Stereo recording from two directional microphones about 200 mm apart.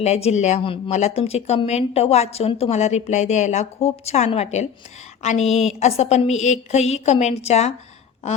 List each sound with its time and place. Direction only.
0.0 s speech: 35° left (ahead or behind)